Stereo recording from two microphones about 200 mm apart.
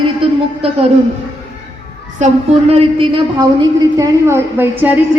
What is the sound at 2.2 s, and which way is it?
A woman's voice, 35° right (ahead or behind).